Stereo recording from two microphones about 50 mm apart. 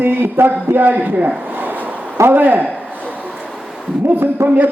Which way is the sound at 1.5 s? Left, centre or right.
Right.